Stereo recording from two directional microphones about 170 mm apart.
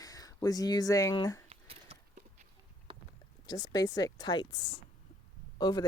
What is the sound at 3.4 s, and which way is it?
Speech, 20° left (ahead or behind).